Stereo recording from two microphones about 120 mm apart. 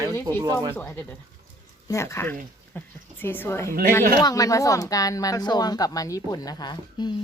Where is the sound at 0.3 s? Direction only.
35° right (ahead or behind).